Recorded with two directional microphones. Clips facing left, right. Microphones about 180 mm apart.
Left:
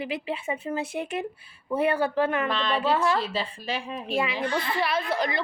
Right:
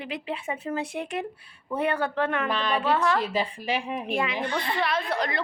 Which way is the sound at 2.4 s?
10° right (ahead or behind).